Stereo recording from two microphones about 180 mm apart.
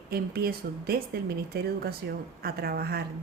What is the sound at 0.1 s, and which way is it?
A woman's voice, 60° right (ahead or behind).